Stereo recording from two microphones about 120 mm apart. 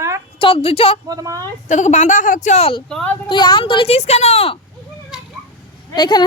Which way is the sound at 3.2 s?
40° left (ahead or behind).